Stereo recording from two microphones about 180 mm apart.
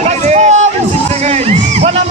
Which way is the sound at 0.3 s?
40° right (ahead or behind).